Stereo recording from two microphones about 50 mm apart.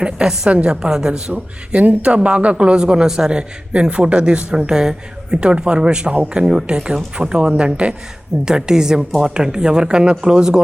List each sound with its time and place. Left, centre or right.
0.0 s speech: centre
1.3 s a man's voice: right; by 10.6 s centre